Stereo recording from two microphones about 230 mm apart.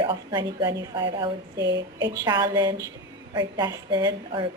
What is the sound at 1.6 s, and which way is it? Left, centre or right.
Speech, right.